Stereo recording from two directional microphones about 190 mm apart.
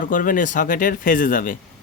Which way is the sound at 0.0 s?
45° left (ahead or behind).